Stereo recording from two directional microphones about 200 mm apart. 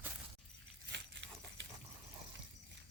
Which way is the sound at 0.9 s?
65° right (ahead or behind).